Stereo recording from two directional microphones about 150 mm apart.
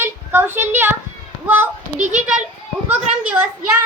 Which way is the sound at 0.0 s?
15° right (ahead or behind).